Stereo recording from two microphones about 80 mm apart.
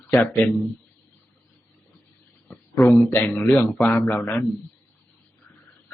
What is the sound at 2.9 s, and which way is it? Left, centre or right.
Speech, left.